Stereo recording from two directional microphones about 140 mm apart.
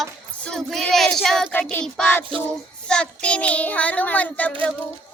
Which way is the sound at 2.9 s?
5° left (ahead or behind).